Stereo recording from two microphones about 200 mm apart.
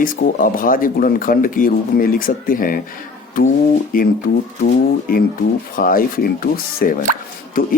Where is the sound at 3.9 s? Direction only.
45° left (ahead or behind).